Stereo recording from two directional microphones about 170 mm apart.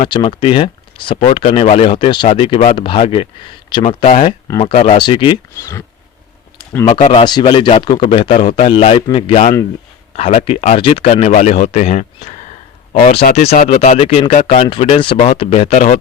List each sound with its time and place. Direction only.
0.1 s speech: 30° left (ahead or behind)
4.1 s speech: 40° left (ahead or behind)
5.5 s speech: 15° left (ahead or behind)
6.8 s speech: 35° left (ahead or behind)